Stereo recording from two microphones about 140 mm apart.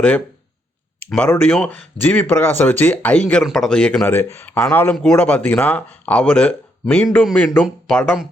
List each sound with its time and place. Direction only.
0.9 s speech: 10° left (ahead or behind)
7.6 s speech: centre (ahead or behind)